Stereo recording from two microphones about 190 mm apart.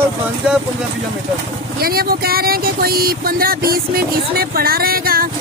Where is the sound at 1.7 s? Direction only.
50° right (ahead or behind).